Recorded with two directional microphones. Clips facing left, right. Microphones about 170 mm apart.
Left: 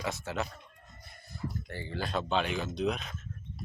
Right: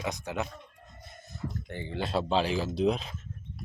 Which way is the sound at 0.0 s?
15° right (ahead or behind).